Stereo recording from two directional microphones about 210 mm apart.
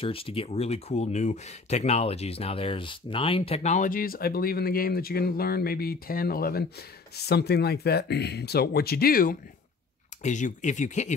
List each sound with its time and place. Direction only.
0.0 s speech: 25° left (ahead or behind)